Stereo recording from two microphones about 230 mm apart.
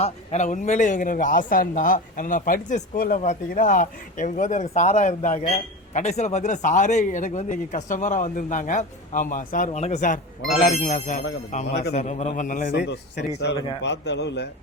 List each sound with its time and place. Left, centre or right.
0.0 s speech: left
11.7 s a man's voice: left
11.9 s a man's voice: left